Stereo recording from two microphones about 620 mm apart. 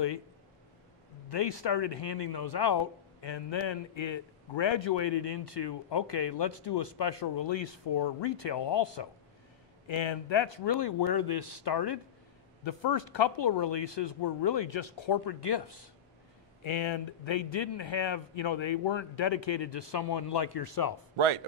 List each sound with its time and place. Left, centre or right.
1.3 s speech: left